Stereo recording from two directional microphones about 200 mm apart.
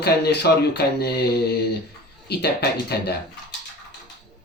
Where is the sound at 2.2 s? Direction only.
55° left (ahead or behind).